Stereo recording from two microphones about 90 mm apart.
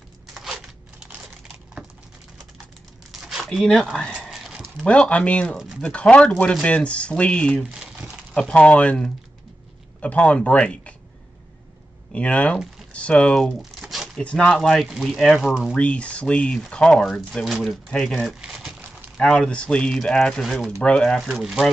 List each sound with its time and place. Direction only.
0.3 s a sound: 5° right (ahead or behind)
3.1 s crumpling: 5° right (ahead or behind)
3.4 s speech: 5° left (ahead or behind)
4.3 s a sound: 5° right (ahead or behind)
4.8 s speech: 10° left (ahead or behind)
7.7 s crumpling: 10° right (ahead or behind)
8.4 s speech: 10° left (ahead or behind)
12.1 s speech: 15° left (ahead or behind)
13.7 s shuffling cards: centre (ahead or behind)
14.2 s speech: 10° left (ahead or behind)
15.7 s speech: 15° left (ahead or behind)
18.1 s a sound: 5° right (ahead or behind)
19.1 s speech: 5° left (ahead or behind)